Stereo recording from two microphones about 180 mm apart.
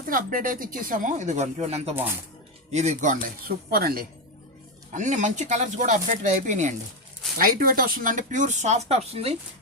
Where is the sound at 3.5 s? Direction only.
55° right (ahead or behind).